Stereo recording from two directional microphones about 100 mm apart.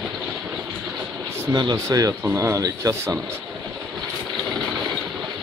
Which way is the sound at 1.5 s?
40° right (ahead or behind).